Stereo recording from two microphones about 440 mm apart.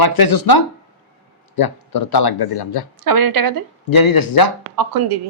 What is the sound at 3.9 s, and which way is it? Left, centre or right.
Speech, left.